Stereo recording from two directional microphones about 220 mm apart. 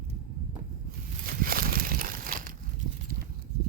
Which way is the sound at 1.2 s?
40° right (ahead or behind).